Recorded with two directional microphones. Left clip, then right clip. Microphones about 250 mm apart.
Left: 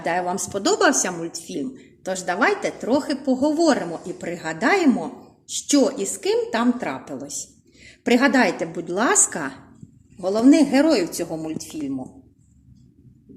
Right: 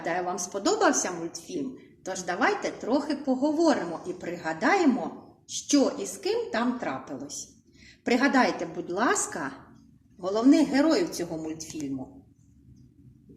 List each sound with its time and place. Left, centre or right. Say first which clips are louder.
0.0 s a woman's voice: left 6 dB; left